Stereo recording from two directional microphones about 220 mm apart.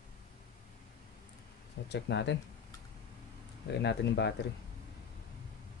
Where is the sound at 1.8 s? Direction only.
50° left (ahead or behind).